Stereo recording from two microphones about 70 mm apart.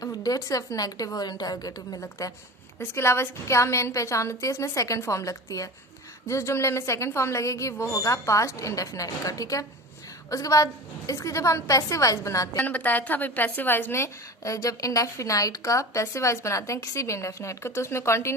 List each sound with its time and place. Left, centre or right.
0.0 s a woman's voice: left
2.0 s a woman's voice: left
2.9 s a woman's voice: left
12.5 s a woman's voice: left